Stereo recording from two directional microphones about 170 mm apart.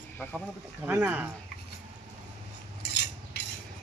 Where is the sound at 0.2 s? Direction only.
10° left (ahead or behind).